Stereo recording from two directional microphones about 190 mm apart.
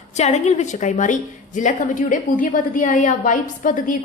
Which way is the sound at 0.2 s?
35° left (ahead or behind).